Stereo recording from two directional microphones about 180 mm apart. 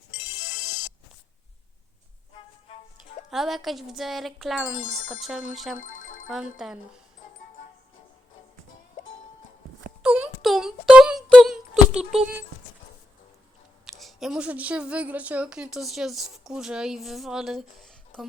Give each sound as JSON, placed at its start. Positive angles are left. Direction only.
{"t": 0.1, "sound": "ringtone", "side_deg": 90}
{"t": 3.2, "sound": "a woman's voice", "side_deg": 0}
{"t": 5.8, "sound": "music", "side_deg": 50}
{"t": 6.2, "sound": "a woman's voice", "side_deg": -5}
{"t": 10.0, "sound": "a sound", "side_deg": -5}
{"t": 13.8, "sound": "speech", "side_deg": 0}